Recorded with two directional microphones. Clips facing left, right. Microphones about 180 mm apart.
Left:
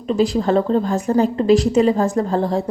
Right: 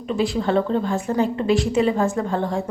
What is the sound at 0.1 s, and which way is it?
A woman's voice, 35° left (ahead or behind).